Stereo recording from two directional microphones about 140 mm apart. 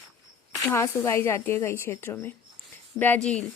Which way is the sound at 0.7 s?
20° left (ahead or behind).